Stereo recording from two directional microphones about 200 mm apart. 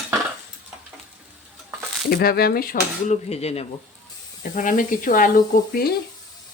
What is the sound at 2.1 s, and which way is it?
Speech, 50° left (ahead or behind).